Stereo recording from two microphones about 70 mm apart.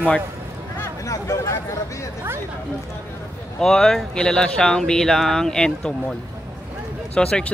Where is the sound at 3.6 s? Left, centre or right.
Centre.